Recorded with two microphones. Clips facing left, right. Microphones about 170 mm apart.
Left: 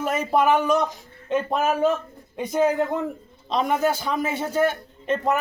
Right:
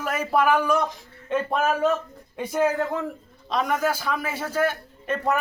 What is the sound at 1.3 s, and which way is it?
A man's voice, 10° left (ahead or behind).